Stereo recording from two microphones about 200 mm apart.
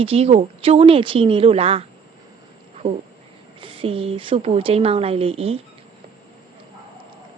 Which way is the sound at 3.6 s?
25° right (ahead or behind).